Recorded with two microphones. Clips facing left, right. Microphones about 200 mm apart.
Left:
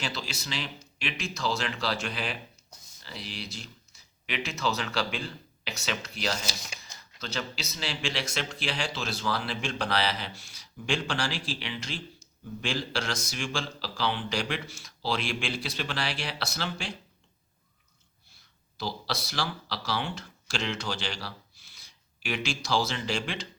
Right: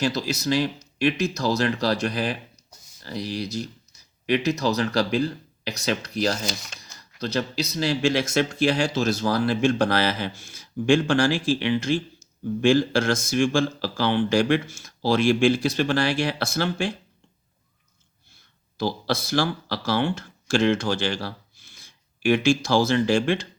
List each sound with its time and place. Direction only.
0.0 s speech: 40° right (ahead or behind)
6.8 s a sound: 15° left (ahead or behind)
7.2 s speech: 35° right (ahead or behind); by 16.9 s 50° right (ahead or behind)
18.8 s speech: 50° right (ahead or behind)